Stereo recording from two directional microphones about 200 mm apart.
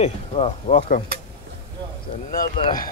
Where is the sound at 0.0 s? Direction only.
30° left (ahead or behind).